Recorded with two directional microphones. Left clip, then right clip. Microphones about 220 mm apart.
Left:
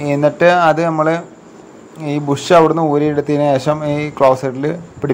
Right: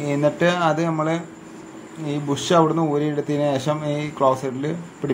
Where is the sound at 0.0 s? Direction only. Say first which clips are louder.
Left 8 dB; 20° left (ahead or behind).